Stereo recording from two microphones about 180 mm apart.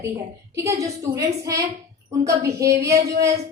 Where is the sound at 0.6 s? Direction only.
15° right (ahead or behind).